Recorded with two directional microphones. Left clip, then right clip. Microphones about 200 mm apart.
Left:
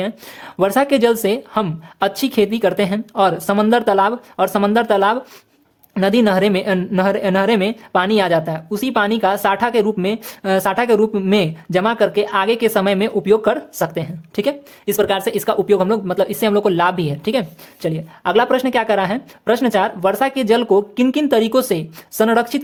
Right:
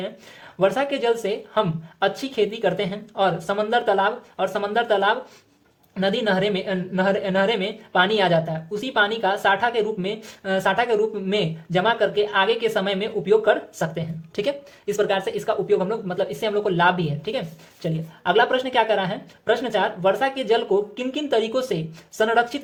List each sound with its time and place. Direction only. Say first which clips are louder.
0.0 s a woman's voice: left 8 dB; 40° left (ahead or behind)